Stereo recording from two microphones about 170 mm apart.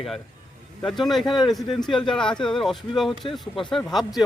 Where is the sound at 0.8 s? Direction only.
Centre (ahead or behind).